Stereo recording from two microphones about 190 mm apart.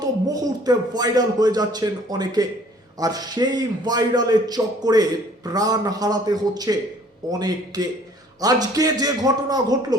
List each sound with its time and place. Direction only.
0.0 s a man's voice: 20° right (ahead or behind)